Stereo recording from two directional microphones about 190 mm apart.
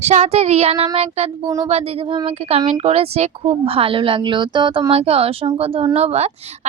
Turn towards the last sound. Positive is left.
turn(degrees=-35)  # may be behind; listen again after turning